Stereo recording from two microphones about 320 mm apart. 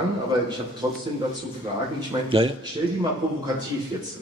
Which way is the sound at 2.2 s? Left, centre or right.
Centre.